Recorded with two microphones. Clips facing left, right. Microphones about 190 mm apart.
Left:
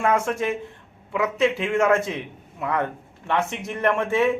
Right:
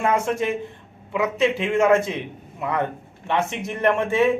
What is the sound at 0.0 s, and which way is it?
Speech, 5° right (ahead or behind).